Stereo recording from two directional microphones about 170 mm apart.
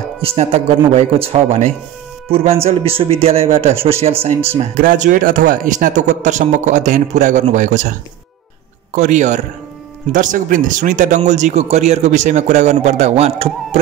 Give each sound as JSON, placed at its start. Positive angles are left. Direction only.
{"t": 0.2, "sound": "speech", "side_deg": -35}
{"t": 4.7, "sound": "speech", "side_deg": -50}
{"t": 8.9, "sound": "speech", "side_deg": -45}